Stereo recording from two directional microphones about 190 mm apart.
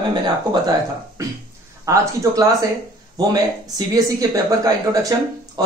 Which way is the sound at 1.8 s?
15° right (ahead or behind).